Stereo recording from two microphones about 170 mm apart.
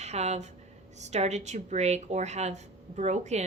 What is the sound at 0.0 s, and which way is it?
A woman's voice, 40° right (ahead or behind).